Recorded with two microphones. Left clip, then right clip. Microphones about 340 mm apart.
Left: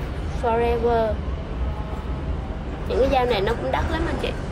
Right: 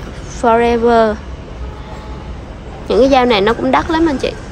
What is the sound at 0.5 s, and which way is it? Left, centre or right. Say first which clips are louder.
Speech: right 10 dB; right.